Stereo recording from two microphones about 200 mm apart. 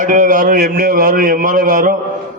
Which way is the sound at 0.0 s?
40° right (ahead or behind).